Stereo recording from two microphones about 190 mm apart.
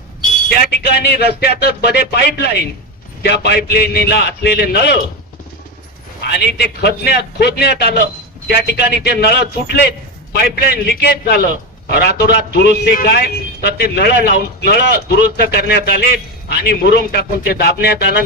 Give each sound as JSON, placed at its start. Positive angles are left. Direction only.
{"t": 0.5, "sound": "a man's voice", "side_deg": 60}
{"t": 6.2, "sound": "a man's voice", "side_deg": 60}
{"t": 12.5, "sound": "a man's voice", "side_deg": 55}